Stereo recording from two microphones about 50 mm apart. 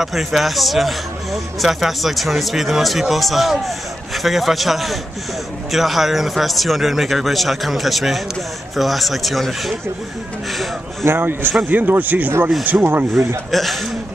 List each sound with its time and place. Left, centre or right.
0.0 s a man's voice: centre
11.1 s a man's voice: right
13.5 s a man's voice: centre